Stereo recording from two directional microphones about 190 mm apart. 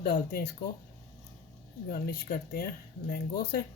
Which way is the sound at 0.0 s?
55° left (ahead or behind).